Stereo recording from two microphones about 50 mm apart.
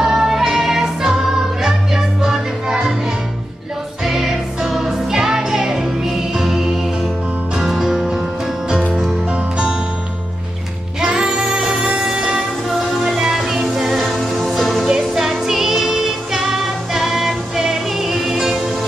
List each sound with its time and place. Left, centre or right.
0.0 s music: centre
4.0 s music: centre
9.3 s music: centre
11.0 s music: centre